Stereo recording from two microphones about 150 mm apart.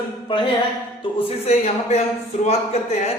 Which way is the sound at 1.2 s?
40° left (ahead or behind).